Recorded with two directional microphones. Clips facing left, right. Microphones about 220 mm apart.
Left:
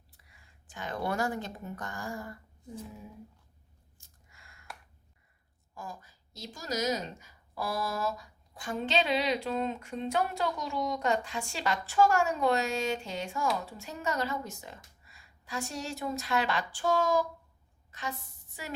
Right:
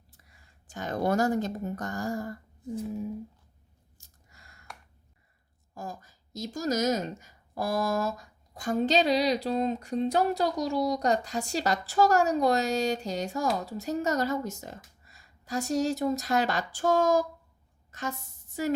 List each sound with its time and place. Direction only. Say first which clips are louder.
0.1 s speech: right 2 dB; 40° right (ahead or behind)
3.9 s a sound: right 3 dB; 40° right (ahead or behind)
5.7 s a woman's voice: right 4 dB; 40° right (ahead or behind)